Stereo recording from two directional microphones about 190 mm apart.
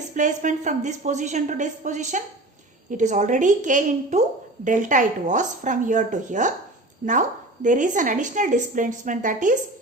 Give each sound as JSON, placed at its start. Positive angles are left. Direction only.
{"t": 0.1, "sound": "a woman's voice", "side_deg": -40}